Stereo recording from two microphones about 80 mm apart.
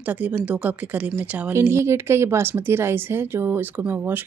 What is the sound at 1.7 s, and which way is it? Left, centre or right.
Speech, right.